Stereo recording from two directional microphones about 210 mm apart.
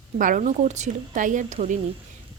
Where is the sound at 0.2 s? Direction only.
40° right (ahead or behind).